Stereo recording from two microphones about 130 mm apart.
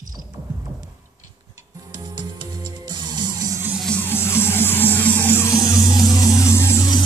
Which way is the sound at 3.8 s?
10° left (ahead or behind).